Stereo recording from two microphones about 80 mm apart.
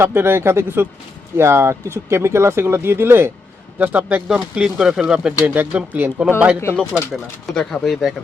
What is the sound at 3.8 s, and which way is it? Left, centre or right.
A man's voice, centre.